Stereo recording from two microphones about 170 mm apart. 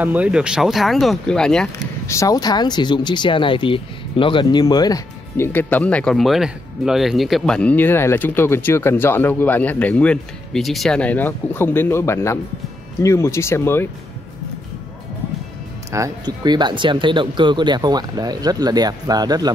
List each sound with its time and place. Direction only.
0.0 s speech: 10° right (ahead or behind)
2.0 s speech: 20° left (ahead or behind)
15.9 s speech: 20° right (ahead or behind)